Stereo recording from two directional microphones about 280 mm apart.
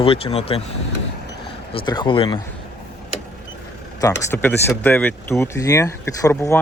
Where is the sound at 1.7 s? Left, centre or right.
Centre.